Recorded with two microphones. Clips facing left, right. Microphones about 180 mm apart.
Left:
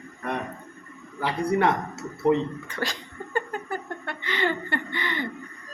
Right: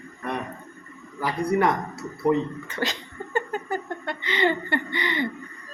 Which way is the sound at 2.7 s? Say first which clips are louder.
Right 2 dB; 20° right (ahead or behind).